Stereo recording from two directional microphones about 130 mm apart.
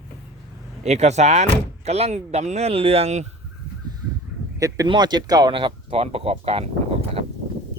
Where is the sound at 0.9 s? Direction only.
60° right (ahead or behind).